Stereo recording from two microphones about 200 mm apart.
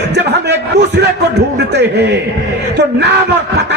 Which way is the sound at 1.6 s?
60° right (ahead or behind).